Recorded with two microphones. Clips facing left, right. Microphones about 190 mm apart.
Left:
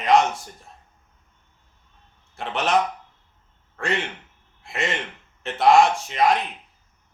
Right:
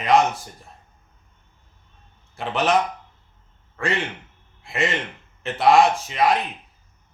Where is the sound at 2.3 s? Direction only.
Centre (ahead or behind).